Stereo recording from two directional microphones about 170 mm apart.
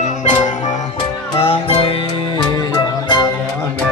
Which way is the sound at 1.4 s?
35° left (ahead or behind).